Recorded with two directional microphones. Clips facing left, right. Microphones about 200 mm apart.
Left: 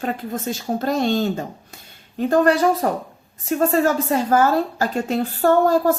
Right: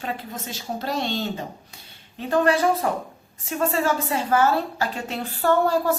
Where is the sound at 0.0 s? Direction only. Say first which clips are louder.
Left 6 dB; 50° left (ahead or behind).